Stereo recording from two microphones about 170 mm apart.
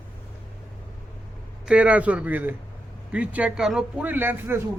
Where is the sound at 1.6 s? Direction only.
5° right (ahead or behind).